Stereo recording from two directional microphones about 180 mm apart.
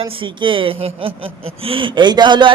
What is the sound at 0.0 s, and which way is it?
A man's voice, 30° right (ahead or behind).